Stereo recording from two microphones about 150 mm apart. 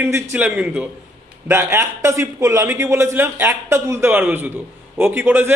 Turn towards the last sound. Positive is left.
turn(degrees=-15)  # may be behind; listen again after turning